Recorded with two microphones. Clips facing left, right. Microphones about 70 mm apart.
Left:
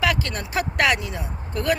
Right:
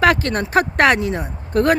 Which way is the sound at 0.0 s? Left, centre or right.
Right.